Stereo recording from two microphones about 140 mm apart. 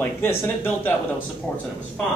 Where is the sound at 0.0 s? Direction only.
15° left (ahead or behind).